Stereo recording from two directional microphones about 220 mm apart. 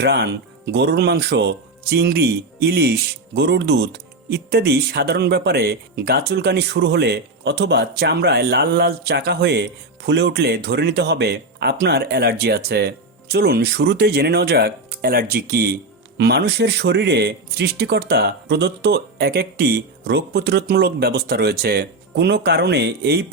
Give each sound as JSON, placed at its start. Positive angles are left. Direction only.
{"t": 0.0, "sound": "speech", "side_deg": -45}